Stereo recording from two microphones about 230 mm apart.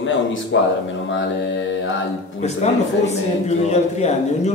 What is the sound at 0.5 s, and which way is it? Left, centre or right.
Speech, left.